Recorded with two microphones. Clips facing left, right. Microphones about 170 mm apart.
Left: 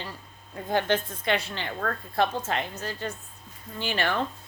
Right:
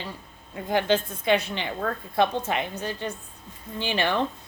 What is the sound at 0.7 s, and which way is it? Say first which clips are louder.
Speech: right 2 dB; 15° right (ahead or behind).